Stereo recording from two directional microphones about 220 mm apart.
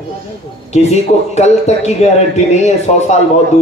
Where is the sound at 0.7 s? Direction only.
30° left (ahead or behind).